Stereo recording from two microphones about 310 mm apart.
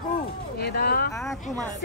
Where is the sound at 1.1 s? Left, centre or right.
Centre.